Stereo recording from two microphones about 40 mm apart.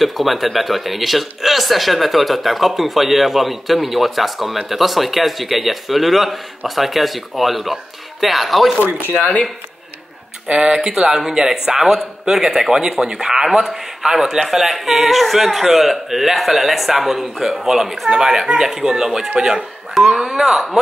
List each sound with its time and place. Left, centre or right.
0.0 s speech: centre
8.8 s speech: left
9.1 s speech: left
10.5 s speech: centre
20.4 s speech: centre